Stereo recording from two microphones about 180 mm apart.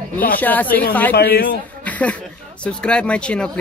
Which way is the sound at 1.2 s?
60° left (ahead or behind).